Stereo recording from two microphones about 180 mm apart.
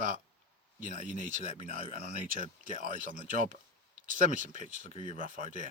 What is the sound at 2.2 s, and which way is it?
Speech, 50° right (ahead or behind).